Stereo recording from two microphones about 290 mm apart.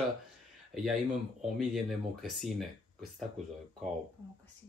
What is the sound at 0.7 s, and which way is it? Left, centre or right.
Speech, centre.